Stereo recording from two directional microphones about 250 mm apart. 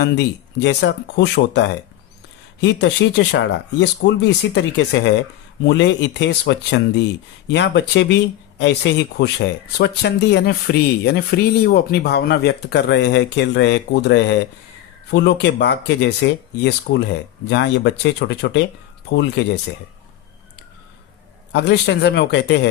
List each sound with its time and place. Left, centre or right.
0.6 s speech: left
21.5 s speech: left